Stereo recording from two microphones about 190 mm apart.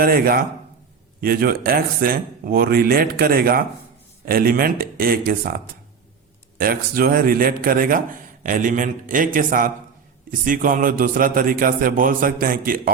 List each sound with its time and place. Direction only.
0.0 s a man's voice: 50° right (ahead or behind)